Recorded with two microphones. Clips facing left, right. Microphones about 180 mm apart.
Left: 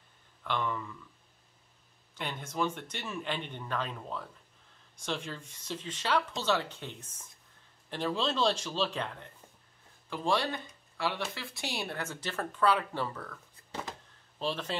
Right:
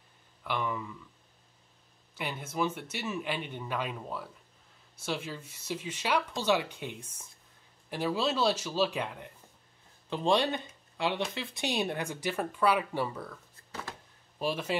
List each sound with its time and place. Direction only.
0.4 s speech: 10° right (ahead or behind)
2.1 s speech: 10° right (ahead or behind)
14.4 s speech: 10° right (ahead or behind)